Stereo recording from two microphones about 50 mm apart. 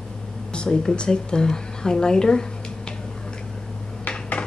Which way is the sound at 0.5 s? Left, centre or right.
Centre.